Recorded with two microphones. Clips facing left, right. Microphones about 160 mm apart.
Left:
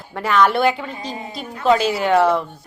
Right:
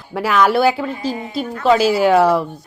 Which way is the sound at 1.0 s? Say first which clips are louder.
Right 7 dB; 30° right (ahead or behind).